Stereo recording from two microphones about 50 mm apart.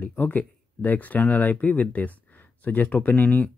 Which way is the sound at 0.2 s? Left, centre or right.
Left.